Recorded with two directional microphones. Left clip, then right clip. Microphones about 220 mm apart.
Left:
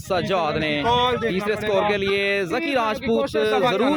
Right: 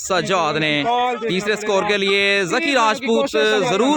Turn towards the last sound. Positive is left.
turn(degrees=-25)  # may be behind; listen again after turning